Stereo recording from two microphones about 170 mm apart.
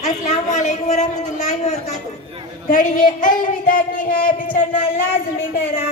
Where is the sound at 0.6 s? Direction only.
45° left (ahead or behind).